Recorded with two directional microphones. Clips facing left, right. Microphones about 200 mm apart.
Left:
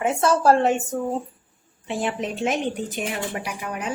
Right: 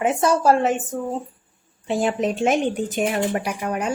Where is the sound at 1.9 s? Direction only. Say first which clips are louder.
Right 5 dB; 40° right (ahead or behind).